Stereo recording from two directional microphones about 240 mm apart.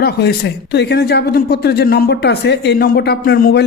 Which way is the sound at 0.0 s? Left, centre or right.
Left.